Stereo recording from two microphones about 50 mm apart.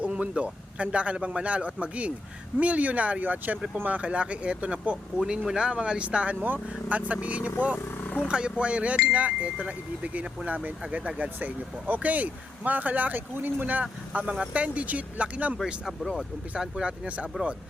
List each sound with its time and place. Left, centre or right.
0.1 s a man's voice: right
16.6 s a man's voice: centre